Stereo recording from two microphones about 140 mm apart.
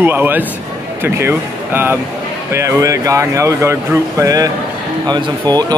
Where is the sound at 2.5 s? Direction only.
20° right (ahead or behind).